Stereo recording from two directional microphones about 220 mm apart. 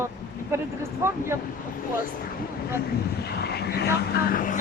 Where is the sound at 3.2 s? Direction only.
45° left (ahead or behind).